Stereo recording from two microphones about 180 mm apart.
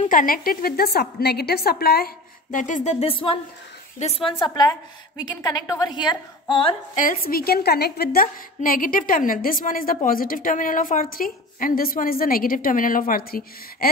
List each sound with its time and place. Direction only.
0.0 s a woman's voice: 50° left (ahead or behind); by 6.8 s 30° left (ahead or behind)
7.0 s a woman's voice: 50° left (ahead or behind)